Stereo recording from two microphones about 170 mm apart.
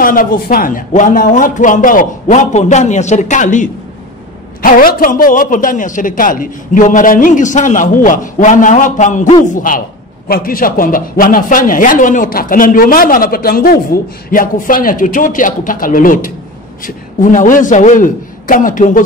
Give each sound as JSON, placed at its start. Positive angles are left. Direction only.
{"t": 0.0, "sound": "a man's voice", "side_deg": 55}